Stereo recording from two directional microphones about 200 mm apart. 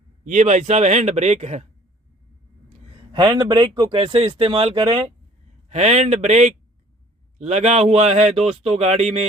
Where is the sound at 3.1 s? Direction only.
20° right (ahead or behind).